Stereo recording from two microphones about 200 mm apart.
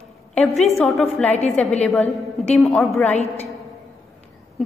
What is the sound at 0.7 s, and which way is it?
A woman's voice, centre (ahead or behind).